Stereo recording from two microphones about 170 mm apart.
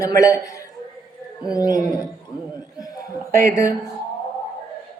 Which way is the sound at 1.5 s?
20° left (ahead or behind).